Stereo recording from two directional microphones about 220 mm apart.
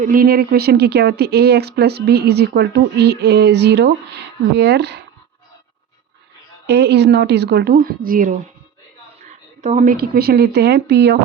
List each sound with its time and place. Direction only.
0.0 s speech: 40° right (ahead or behind)
6.7 s speech: 50° right (ahead or behind)
9.6 s speech: 30° right (ahead or behind); by 11.2 s 50° right (ahead or behind)